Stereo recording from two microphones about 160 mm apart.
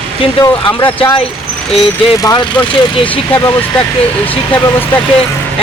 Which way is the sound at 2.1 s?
25° left (ahead or behind).